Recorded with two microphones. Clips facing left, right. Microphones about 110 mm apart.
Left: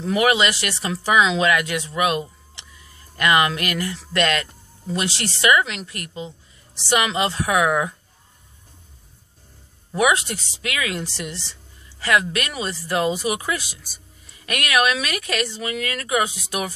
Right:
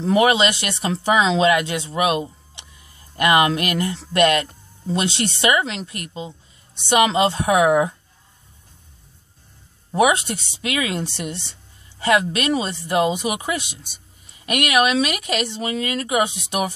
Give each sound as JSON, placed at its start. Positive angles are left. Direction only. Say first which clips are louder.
{"t": 0.0, "sound": "speech", "louder": "right 3 dB", "side_deg": -30}
{"t": 9.9, "sound": "speech", "louder": "right 2 dB", "side_deg": -25}